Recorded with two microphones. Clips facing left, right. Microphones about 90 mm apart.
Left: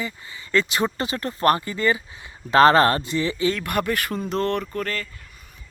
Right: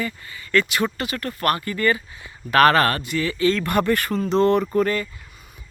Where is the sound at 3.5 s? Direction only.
5° left (ahead or behind); by 5.1 s 15° right (ahead or behind).